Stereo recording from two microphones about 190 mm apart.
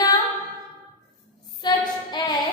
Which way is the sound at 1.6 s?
20° left (ahead or behind).